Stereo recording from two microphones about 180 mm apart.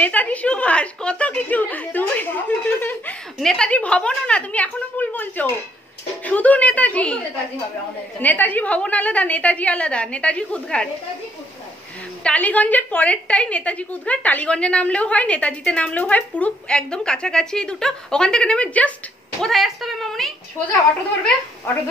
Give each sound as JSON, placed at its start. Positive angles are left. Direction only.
{"t": 0.0, "sound": "a woman's voice", "side_deg": 10}
{"t": 8.2, "sound": "a woman's voice", "side_deg": 10}
{"t": 12.2, "sound": "a woman's voice", "side_deg": 5}